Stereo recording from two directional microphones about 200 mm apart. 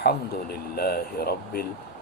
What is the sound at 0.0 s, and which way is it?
Speech, 50° left (ahead or behind).